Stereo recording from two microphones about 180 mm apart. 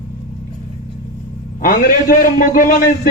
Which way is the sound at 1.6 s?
50° left (ahead or behind).